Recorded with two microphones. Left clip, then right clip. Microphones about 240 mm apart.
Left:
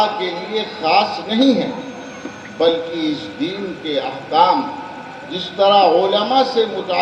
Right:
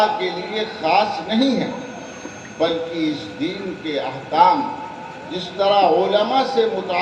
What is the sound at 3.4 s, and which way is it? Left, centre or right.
A man's voice, left.